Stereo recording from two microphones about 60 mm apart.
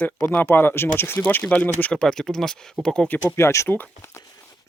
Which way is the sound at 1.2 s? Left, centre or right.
Left.